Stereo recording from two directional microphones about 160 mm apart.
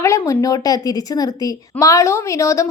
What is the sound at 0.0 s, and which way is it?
A woman's voice, 20° left (ahead or behind).